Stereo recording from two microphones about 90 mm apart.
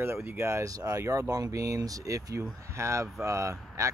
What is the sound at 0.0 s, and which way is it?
Speech, 30° right (ahead or behind).